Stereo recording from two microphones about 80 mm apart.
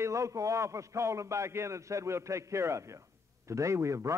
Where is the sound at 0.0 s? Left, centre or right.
Right.